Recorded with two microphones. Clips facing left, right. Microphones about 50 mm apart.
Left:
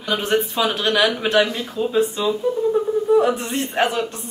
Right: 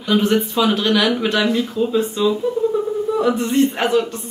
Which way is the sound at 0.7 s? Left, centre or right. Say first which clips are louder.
Right 2 dB; centre.